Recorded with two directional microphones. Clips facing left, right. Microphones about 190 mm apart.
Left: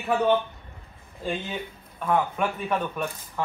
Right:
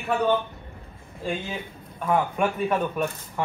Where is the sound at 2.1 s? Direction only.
10° right (ahead or behind).